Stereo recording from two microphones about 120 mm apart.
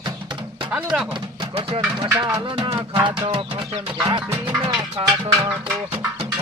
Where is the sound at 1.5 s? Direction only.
50° right (ahead or behind).